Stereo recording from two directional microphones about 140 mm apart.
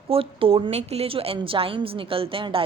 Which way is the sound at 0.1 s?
40° right (ahead or behind).